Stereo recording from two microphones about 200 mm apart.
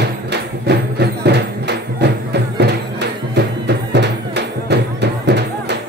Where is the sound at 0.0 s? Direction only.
55° right (ahead or behind).